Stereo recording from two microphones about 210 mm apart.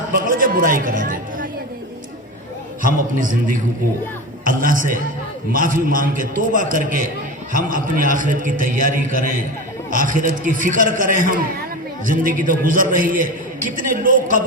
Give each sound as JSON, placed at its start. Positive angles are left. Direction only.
{"t": 0.2, "sound": "a man's voice", "side_deg": -40}
{"t": 2.8, "sound": "a man's voice", "side_deg": -40}